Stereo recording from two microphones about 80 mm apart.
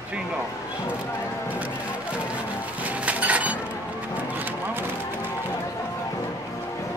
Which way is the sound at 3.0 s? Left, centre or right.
Centre.